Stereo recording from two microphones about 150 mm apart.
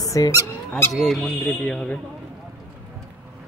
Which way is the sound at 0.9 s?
Centre (ahead or behind).